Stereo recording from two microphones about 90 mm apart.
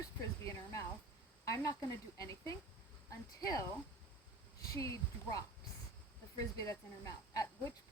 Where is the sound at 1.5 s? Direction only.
35° left (ahead or behind).